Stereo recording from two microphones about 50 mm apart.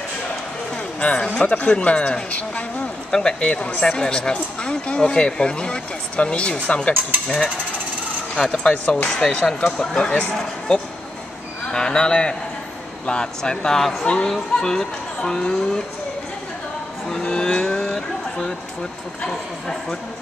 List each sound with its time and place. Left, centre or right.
1.0 s speech: centre
8.4 s a man's voice: centre
13.7 s speech: centre
14.0 s speech: centre
17.2 s vehicle: centre
19.2 s speech: centre